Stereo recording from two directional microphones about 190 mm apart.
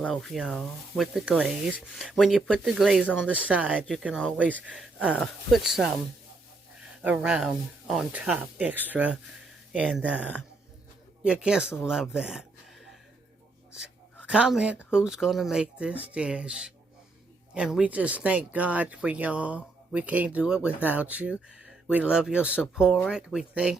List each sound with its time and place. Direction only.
0.0 s speech: 5° left (ahead or behind)
4.9 s speech: 5° left (ahead or behind)
7.0 s speech: 5° right (ahead or behind)
14.3 s speech: 5° right (ahead or behind)